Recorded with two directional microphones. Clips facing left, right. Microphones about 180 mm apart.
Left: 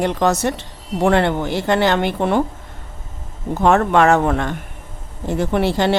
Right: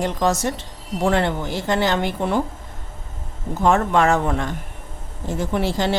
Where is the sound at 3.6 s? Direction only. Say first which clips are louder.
Left 3 dB; 65° left (ahead or behind).